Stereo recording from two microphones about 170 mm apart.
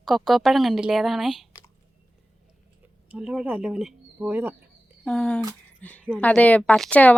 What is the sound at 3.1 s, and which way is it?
Speech, 5° right (ahead or behind).